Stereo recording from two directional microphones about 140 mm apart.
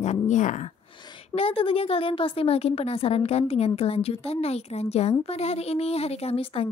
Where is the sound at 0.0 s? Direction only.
55° left (ahead or behind).